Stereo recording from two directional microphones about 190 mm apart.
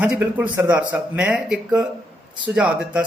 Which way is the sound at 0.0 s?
5° right (ahead or behind).